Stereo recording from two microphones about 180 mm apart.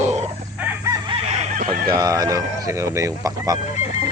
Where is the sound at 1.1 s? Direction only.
30° right (ahead or behind).